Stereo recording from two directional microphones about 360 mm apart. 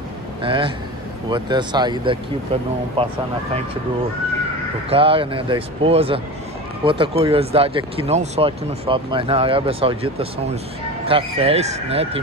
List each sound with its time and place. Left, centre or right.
0.4 s a man's voice: centre
4.8 s speech: centre